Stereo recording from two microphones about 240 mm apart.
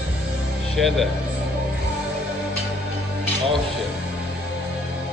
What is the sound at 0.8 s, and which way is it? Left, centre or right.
Speech, centre.